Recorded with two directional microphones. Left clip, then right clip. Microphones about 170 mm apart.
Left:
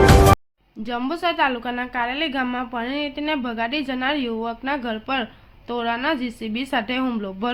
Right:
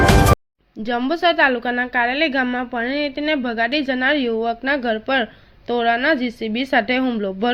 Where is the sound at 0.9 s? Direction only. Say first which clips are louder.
Right 6 dB; 20° right (ahead or behind).